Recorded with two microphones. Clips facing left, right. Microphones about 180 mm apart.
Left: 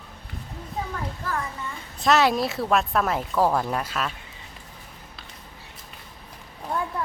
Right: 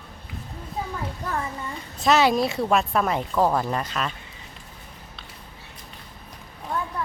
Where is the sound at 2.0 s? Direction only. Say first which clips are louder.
Right 1 dB; centre (ahead or behind).